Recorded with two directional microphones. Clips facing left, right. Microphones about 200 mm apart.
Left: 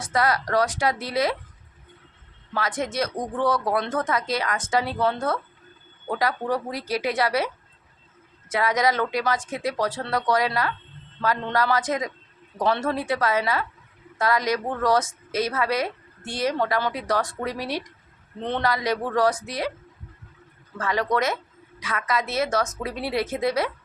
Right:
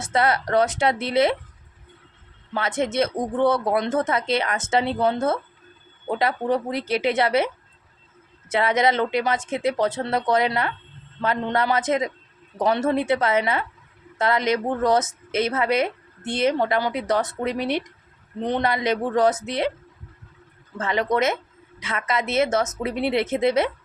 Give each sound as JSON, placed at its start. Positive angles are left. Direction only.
{"t": 0.0, "sound": "a woman's voice", "side_deg": -25}
{"t": 2.5, "sound": "a woman's voice", "side_deg": -25}
{"t": 20.7, "sound": "a woman's voice", "side_deg": -20}